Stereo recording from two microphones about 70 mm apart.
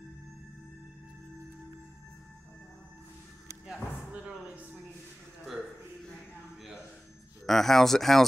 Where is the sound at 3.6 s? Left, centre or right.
Centre.